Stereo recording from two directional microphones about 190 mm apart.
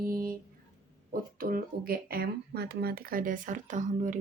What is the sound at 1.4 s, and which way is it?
Speech, 50° right (ahead or behind).